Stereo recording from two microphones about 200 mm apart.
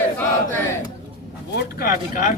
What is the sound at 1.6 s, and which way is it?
Speech, 50° left (ahead or behind).